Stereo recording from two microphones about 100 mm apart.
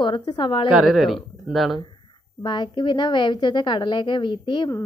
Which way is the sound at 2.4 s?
50° left (ahead or behind).